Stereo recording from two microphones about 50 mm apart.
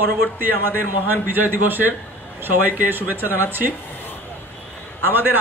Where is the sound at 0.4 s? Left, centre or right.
Right.